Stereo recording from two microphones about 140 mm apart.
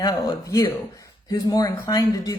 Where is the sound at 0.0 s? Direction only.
25° left (ahead or behind).